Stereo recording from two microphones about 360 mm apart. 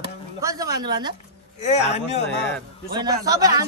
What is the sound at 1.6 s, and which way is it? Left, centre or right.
Speech, centre.